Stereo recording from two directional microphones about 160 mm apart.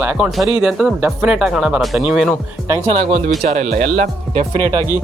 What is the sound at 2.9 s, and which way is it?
Speech, 35° right (ahead or behind).